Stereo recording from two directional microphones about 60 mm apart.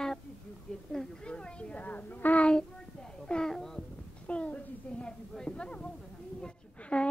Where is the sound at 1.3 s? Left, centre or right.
Centre.